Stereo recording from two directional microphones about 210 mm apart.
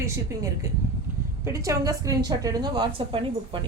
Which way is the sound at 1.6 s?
15° right (ahead or behind).